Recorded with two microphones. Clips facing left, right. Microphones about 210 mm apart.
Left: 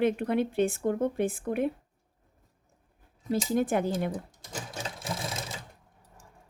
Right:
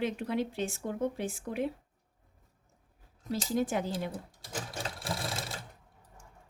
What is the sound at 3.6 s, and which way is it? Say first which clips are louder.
Speech: left 3 dB; 55° left (ahead or behind).